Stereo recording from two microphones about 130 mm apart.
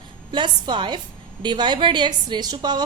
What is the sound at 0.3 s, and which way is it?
A woman's voice, 35° right (ahead or behind).